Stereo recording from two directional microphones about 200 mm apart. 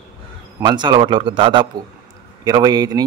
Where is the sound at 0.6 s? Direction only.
20° right (ahead or behind).